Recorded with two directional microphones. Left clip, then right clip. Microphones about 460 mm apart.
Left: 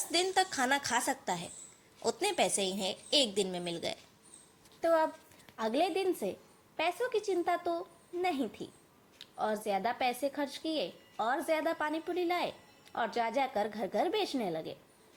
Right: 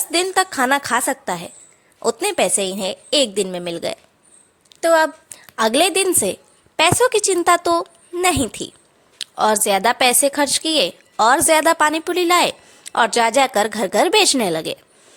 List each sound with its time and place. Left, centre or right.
0.1 s a woman's voice: centre